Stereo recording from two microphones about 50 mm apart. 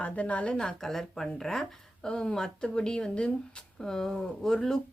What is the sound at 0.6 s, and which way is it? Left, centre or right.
Speech, centre.